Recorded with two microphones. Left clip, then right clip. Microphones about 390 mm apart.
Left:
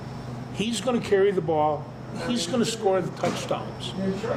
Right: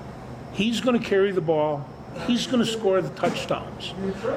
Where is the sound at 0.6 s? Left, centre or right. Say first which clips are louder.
Right 3 dB; right.